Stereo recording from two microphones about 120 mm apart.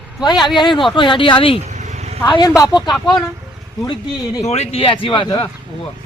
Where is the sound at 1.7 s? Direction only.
75° right (ahead or behind).